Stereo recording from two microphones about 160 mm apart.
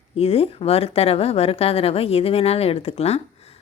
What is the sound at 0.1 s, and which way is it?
Speech, 40° left (ahead or behind).